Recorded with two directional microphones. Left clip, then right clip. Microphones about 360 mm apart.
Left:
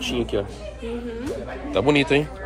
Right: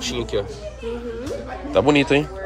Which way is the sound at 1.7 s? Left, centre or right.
Centre.